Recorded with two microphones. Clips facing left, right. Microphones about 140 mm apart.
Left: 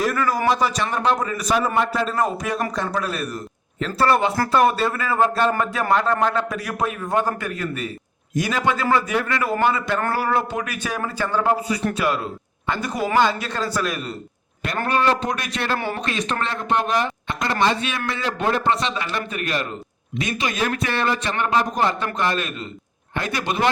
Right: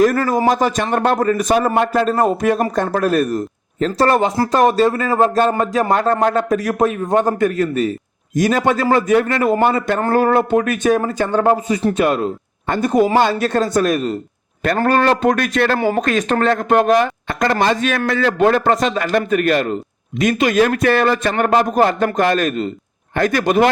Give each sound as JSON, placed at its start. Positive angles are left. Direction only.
{"t": 0.0, "sound": "speech", "side_deg": -45}